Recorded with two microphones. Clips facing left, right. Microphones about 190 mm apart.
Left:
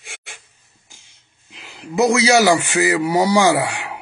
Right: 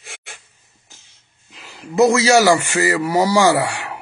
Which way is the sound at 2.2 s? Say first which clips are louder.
Right 1 dB; 15° left (ahead or behind).